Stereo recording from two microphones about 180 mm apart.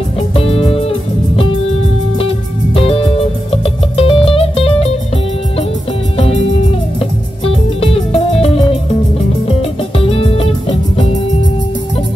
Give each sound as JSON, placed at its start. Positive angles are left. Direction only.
{"t": 0.3, "sound": "music", "side_deg": 30}
{"t": 6.1, "sound": "music", "side_deg": 35}
{"t": 7.4, "sound": "music", "side_deg": 30}